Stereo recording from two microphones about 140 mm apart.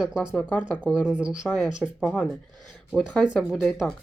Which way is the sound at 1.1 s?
10° right (ahead or behind).